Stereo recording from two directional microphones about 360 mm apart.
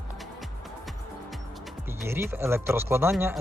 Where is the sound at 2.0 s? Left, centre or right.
Centre.